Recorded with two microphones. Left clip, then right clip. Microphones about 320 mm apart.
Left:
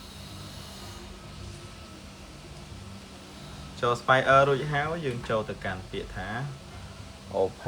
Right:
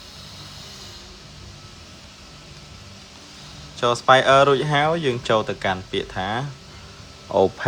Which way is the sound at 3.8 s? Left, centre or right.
Centre.